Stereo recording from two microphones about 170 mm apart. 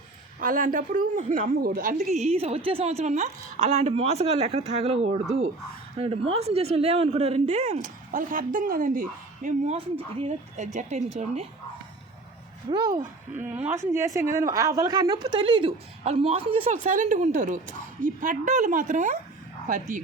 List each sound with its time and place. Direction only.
0.3 s a woman's voice: 50° right (ahead or behind)
12.7 s a woman's voice: 25° right (ahead or behind)
13.4 s a woman's voice: 10° right (ahead or behind); by 16.7 s 30° right (ahead or behind)
16.7 s a woman's voice: 45° right (ahead or behind)